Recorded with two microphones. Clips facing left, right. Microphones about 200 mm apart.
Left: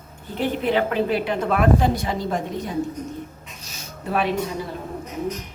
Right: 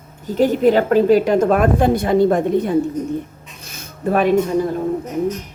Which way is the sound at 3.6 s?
55° right (ahead or behind).